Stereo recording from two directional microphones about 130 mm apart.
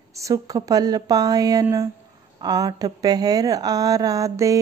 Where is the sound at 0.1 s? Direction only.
25° right (ahead or behind).